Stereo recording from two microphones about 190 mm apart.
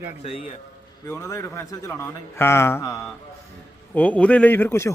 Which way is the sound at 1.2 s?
15° left (ahead or behind).